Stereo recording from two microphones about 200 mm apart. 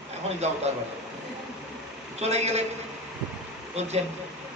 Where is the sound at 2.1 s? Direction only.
35° right (ahead or behind).